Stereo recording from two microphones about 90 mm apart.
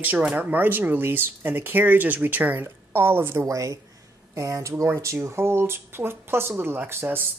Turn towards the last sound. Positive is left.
turn(degrees=-25)  # may be behind; listen again after turning